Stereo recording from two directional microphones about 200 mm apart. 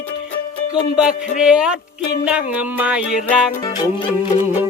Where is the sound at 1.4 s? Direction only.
5° right (ahead or behind).